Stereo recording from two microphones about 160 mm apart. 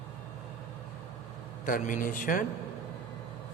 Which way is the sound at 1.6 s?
60° left (ahead or behind).